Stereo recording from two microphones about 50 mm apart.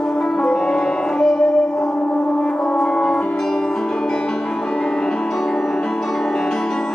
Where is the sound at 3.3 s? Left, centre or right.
Centre.